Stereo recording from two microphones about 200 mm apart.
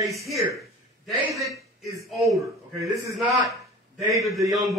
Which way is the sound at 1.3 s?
15° right (ahead or behind).